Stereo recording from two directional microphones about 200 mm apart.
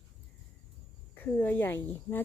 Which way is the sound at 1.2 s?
10° left (ahead or behind).